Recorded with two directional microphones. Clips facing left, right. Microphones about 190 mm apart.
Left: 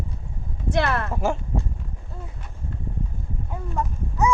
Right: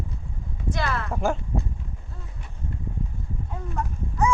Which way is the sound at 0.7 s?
60° left (ahead or behind).